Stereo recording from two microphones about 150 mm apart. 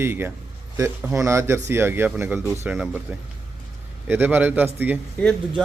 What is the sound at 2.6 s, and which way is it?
A man's voice, 5° right (ahead or behind).